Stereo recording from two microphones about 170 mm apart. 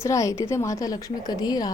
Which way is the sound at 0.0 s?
20° left (ahead or behind).